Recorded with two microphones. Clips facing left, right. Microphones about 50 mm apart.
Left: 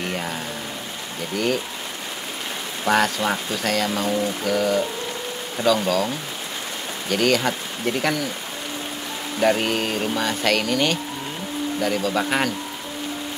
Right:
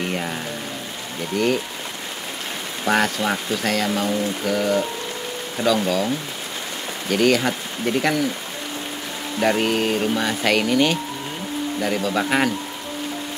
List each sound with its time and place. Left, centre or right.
0.0 s rain: centre
1.3 s speech: centre
2.8 s speech: centre
9.4 s speech: centre